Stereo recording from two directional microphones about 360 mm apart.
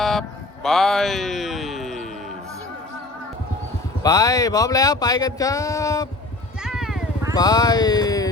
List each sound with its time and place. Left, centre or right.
0.0 s music: centre
4.0 s speech: centre
6.6 s vehicle: centre
7.3 s a sound: centre